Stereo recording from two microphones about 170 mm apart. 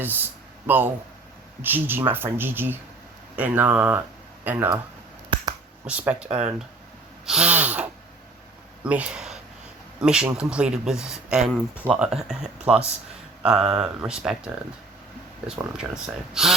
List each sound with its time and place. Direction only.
0.0 s speech: 10° right (ahead or behind)
1.6 s speech: 10° right (ahead or behind)
5.3 s finger snapping: 30° right (ahead or behind)
5.8 s speech: 10° right (ahead or behind)
6.2 s speech: 35° right (ahead or behind)
7.3 s speech: 5° right (ahead or behind)
16.3 s speech: centre (ahead or behind)